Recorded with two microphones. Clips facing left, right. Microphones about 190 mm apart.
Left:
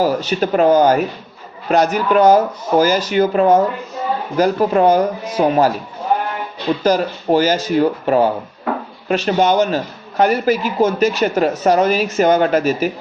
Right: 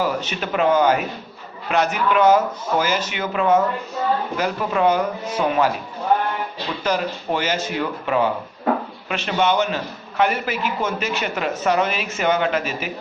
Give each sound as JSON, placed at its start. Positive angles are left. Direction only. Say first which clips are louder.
{"t": 0.0, "sound": "a man's voice", "louder": "left 7 dB", "side_deg": 35}